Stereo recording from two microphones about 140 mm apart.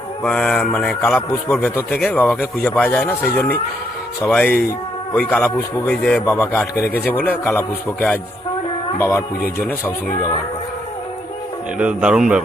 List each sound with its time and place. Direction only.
0.2 s a man's voice: 5° left (ahead or behind)
6.2 s a man's voice: 15° left (ahead or behind)
11.8 s speech: 10° right (ahead or behind)